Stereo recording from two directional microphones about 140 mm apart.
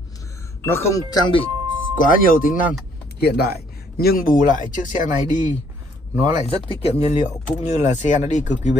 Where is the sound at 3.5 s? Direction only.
90° left; by 5.1 s 65° left (ahead or behind).